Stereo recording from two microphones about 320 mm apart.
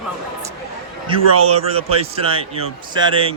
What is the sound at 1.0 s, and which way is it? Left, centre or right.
A man's voice, centre.